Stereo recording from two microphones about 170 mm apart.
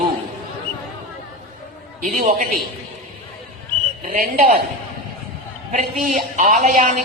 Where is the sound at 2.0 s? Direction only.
45° right (ahead or behind).